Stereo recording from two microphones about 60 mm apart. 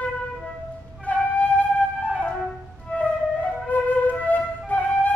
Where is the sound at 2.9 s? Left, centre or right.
Left.